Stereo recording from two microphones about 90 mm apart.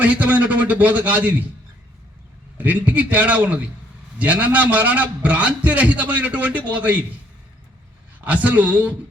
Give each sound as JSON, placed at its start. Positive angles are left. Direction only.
{"t": 0.0, "sound": "a man's voice", "side_deg": -15}
{"t": 2.6, "sound": "a man's voice", "side_deg": -20}
{"t": 8.2, "sound": "a man's voice", "side_deg": -15}